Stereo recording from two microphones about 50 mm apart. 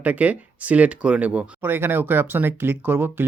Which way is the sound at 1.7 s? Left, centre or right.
Right.